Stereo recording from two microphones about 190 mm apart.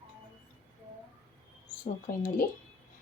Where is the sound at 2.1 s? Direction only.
45° left (ahead or behind).